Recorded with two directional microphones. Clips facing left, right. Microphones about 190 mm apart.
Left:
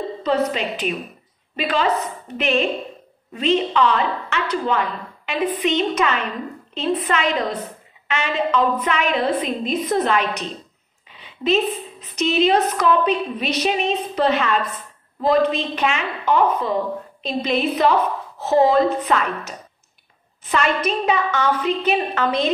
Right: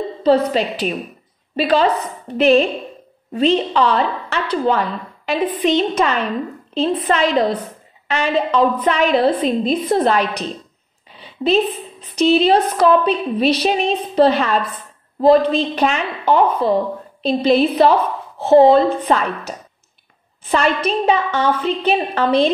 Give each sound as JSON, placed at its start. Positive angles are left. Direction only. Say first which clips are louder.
{"t": 0.2, "sound": "a woman's voice", "louder": "right 6 dB", "side_deg": -30}